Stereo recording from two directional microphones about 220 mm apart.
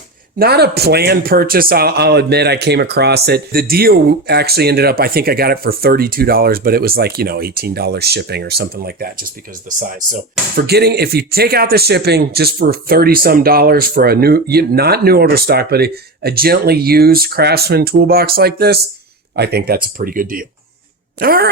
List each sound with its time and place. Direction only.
0.3 s speech: 45° right (ahead or behind)